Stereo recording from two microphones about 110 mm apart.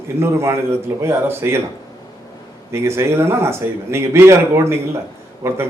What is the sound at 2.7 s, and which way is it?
Speech, 25° right (ahead or behind).